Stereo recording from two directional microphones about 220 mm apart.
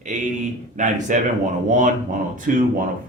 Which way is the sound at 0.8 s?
35° right (ahead or behind).